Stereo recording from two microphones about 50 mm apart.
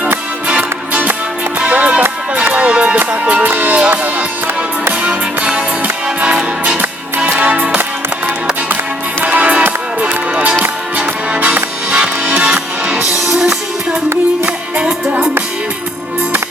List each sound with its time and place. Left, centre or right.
1.5 s music: right
3.4 s music: right
5.0 s music: right
7.2 s music: right
9.2 s music: right
12.4 s music: centre